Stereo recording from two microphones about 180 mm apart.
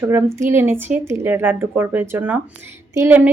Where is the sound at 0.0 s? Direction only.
15° right (ahead or behind).